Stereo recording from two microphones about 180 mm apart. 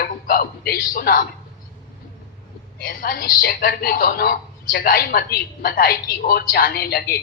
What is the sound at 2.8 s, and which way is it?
A woman's voice, 50° left (ahead or behind).